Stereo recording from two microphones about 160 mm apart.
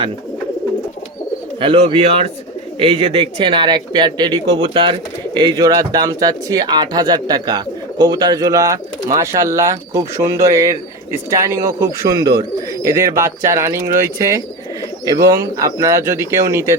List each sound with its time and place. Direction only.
1.6 s speech: 35° right (ahead or behind); by 16.7 s 15° right (ahead or behind)